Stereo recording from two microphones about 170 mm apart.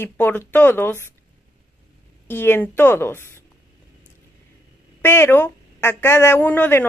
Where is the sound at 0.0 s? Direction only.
10° left (ahead or behind).